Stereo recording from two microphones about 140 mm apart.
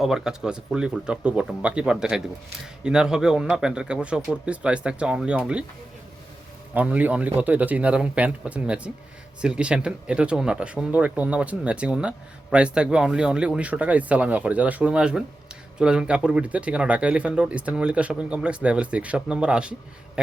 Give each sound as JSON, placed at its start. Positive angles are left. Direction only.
{"t": 0.0, "sound": "speech", "side_deg": -5}
{"t": 6.7, "sound": "speech", "side_deg": -10}